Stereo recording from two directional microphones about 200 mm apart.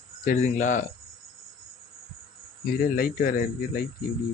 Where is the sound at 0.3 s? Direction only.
40° left (ahead or behind).